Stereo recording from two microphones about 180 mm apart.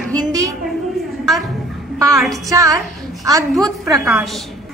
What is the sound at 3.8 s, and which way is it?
Speech, centre (ahead or behind).